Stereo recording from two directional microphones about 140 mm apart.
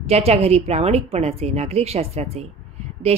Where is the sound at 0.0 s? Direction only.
45° right (ahead or behind).